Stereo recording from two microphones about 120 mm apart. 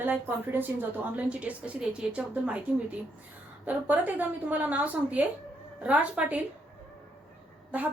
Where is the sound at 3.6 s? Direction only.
15° right (ahead or behind).